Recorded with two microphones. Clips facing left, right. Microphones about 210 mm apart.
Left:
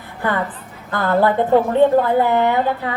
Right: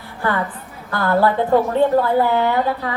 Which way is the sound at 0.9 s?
20° left (ahead or behind).